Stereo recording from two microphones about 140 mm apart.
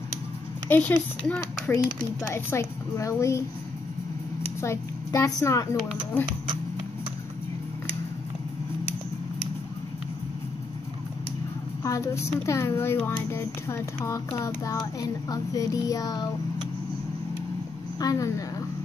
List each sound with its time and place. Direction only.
0.7 s a woman's voice: 10° left (ahead or behind)
4.6 s speech: 20° left (ahead or behind)
11.8 s speech: 20° left (ahead or behind)
17.9 s speech: 25° left (ahead or behind)